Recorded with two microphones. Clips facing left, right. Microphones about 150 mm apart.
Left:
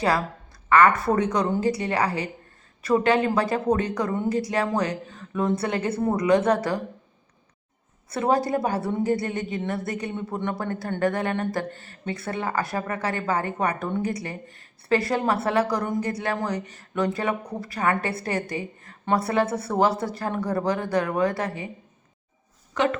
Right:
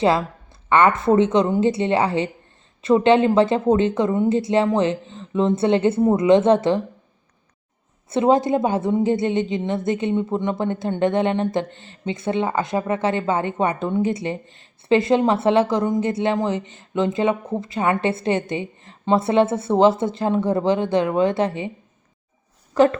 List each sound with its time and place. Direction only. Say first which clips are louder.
0.7 s a woman's voice: right 3 dB; 25° right (ahead or behind)
8.1 s a woman's voice: right 6 dB; 20° right (ahead or behind)
22.7 s speech: right 8 dB; 35° right (ahead or behind)